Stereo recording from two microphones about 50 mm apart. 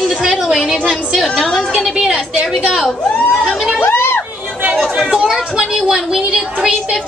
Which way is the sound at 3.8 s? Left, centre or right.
Left.